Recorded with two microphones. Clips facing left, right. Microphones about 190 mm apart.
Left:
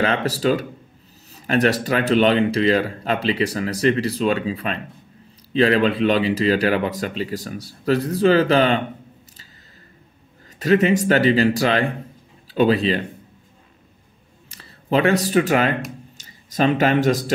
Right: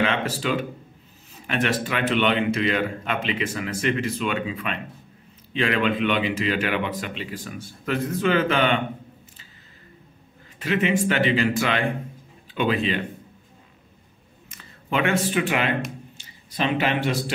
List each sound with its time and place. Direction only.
0.0 s speech: 40° left (ahead or behind)
10.6 s speech: 40° left (ahead or behind)
14.5 s speech: 35° left (ahead or behind)